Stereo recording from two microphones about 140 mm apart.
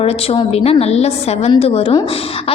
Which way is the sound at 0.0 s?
45° left (ahead or behind).